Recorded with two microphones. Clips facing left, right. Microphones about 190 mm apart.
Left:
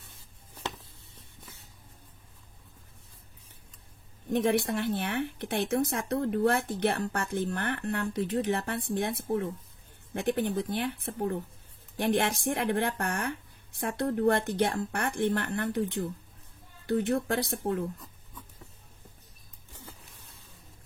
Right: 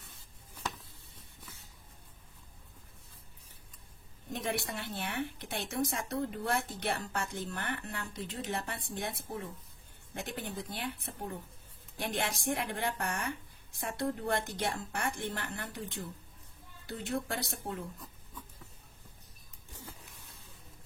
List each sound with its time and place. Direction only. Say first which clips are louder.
4.3 s speech: left 10 dB; 55° left (ahead or behind)
16.9 s speech: left 9 dB; 60° left (ahead or behind)